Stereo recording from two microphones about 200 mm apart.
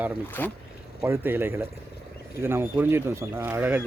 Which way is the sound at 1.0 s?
10° right (ahead or behind).